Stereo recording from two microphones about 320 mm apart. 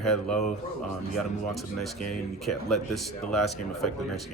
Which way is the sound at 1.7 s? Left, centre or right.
Centre.